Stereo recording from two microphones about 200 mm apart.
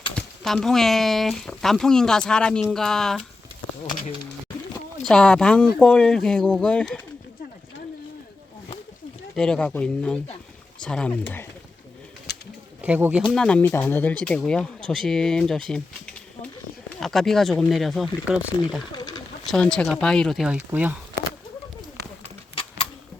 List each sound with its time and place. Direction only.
0.2 s speech: centre (ahead or behind)
5.0 s speech: 5° left (ahead or behind)
9.3 s speech: 5° left (ahead or behind)
12.8 s speech: 5° right (ahead or behind)
13.3 s speech: 5° left (ahead or behind)
18.9 s bird: 20° left (ahead or behind)
19.5 s speech: 5° left (ahead or behind)